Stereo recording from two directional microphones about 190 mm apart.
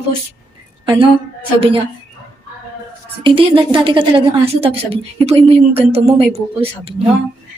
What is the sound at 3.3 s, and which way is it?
A woman's voice, 25° right (ahead or behind).